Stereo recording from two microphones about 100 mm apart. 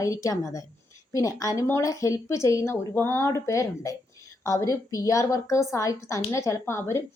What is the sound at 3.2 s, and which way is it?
A woman's voice, 30° left (ahead or behind).